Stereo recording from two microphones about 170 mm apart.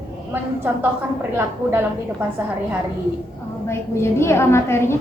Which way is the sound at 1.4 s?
15° right (ahead or behind).